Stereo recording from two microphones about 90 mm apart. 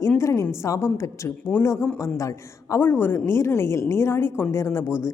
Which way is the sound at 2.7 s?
25° left (ahead or behind).